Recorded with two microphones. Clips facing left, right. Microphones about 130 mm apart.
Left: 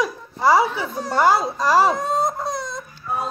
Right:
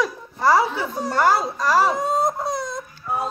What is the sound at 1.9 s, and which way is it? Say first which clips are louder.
Crying: even; 10° right (ahead or behind).